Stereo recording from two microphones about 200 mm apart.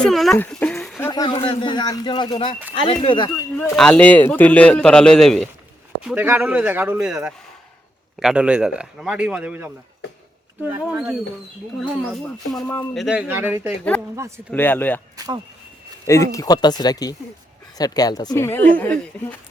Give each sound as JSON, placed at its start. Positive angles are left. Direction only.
{"t": 0.0, "sound": "speech", "side_deg": 0}
{"t": 0.9, "sound": "speech", "side_deg": 15}
{"t": 3.6, "sound": "a man's voice", "side_deg": 5}
{"t": 14.5, "sound": "speech", "side_deg": 10}
{"t": 15.1, "sound": "speech", "side_deg": -20}
{"t": 16.0, "sound": "speech", "side_deg": 15}